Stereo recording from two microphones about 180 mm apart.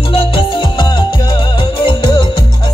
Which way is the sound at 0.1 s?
30° left (ahead or behind).